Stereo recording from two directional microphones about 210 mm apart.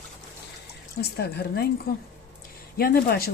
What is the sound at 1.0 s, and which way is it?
Speech, 50° left (ahead or behind).